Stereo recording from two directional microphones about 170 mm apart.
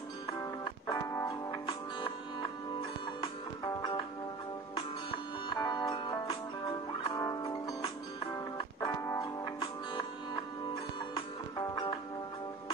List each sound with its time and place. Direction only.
0.9 s music: 15° left (ahead or behind)
3.2 s music: 25° left (ahead or behind)
5.5 s music: 25° left (ahead or behind)